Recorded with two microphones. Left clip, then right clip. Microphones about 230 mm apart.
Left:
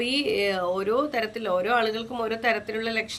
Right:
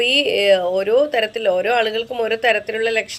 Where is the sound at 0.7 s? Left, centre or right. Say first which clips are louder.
Right 9 dB; left.